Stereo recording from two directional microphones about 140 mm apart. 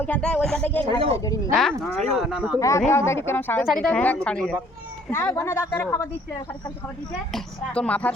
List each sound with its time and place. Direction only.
0.0 s a woman's voice: 10° left (ahead or behind)
0.9 s speech: 40° right (ahead or behind)
1.8 s speech: centre (ahead or behind)
2.6 s a woman's voice: 20° left (ahead or behind)
3.7 s a woman's voice: 5° left (ahead or behind)
5.1 s speech: 20° left (ahead or behind)
7.3 s a woman's voice: 10° left (ahead or behind)